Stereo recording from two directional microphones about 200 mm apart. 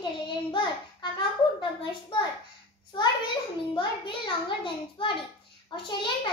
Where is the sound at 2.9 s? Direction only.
25° left (ahead or behind).